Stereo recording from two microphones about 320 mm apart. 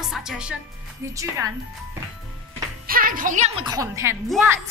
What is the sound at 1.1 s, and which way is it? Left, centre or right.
Speech, centre.